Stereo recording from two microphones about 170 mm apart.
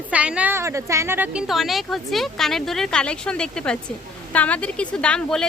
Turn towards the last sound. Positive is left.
turn(degrees=5)  # may be behind; listen again after turning